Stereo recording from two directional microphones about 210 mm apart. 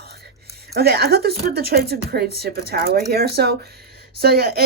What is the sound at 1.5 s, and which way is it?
Speech, 50° right (ahead or behind).